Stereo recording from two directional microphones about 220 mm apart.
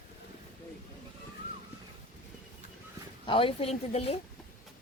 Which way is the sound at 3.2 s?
25° left (ahead or behind).